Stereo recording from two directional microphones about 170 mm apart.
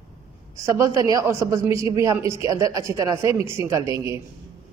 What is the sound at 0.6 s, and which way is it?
Speech, 20° right (ahead or behind).